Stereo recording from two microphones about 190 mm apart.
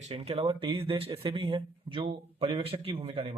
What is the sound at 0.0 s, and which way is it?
Speech, 35° right (ahead or behind).